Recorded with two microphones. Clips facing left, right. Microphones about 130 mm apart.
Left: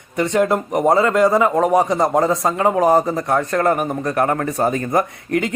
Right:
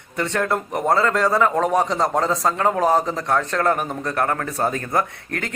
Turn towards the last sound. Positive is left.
turn(degrees=15)  # may be behind; listen again after turning